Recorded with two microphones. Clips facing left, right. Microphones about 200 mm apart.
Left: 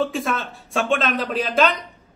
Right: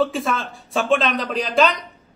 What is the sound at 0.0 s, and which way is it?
A man's voice, centre (ahead or behind).